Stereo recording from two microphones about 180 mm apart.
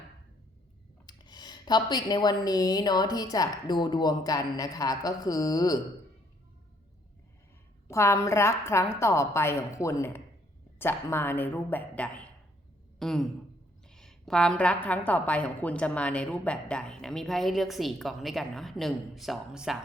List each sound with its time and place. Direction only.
1.0 s speech: 20° left (ahead or behind)
7.9 s a woman's voice: 15° left (ahead or behind)
13.0 s a sound: centre (ahead or behind)
13.8 s a woman's voice: 5° left (ahead or behind)